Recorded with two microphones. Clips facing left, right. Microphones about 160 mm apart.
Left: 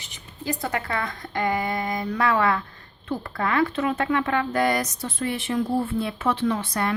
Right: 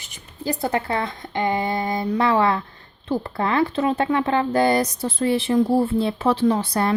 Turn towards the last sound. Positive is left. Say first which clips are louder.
# right 5 dB
turn(degrees=-30)  # may be behind; listen again after turning